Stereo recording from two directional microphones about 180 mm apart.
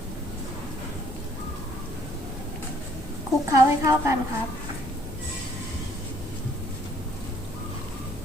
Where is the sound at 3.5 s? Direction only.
15° right (ahead or behind).